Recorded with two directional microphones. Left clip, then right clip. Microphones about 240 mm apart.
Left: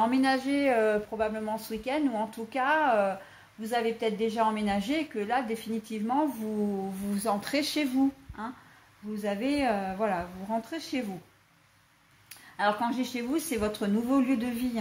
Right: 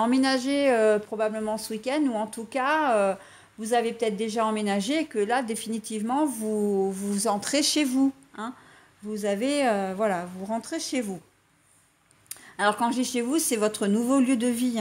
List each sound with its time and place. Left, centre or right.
0.0 s speech: right
12.3 s speech: right